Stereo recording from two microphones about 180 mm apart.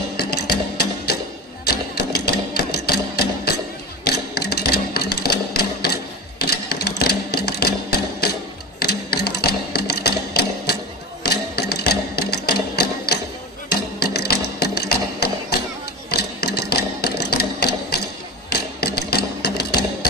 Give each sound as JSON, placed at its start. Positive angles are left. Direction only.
{"t": 0.2, "sound": "music", "side_deg": 65}
{"t": 1.6, "sound": "sewing machine", "side_deg": 60}
{"t": 13.7, "sound": "music", "side_deg": 65}
{"t": 14.6, "sound": "mechanisms", "side_deg": 65}
{"t": 16.1, "sound": "sewing machine", "side_deg": 65}